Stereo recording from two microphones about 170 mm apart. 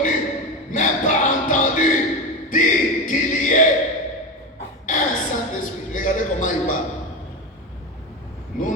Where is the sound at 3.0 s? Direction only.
50° left (ahead or behind).